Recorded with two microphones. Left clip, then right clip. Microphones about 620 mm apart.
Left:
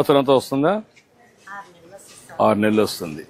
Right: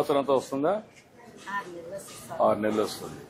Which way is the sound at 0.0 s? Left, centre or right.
Left.